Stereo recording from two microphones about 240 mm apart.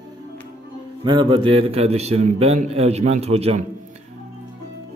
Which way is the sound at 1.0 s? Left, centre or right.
Centre.